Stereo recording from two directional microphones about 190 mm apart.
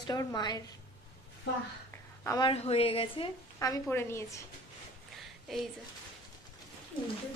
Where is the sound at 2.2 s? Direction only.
15° left (ahead or behind).